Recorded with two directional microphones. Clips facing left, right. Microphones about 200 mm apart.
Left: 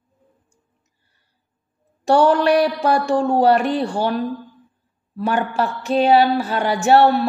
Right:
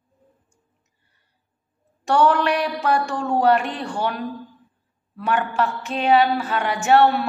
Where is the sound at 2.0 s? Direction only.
30° left (ahead or behind).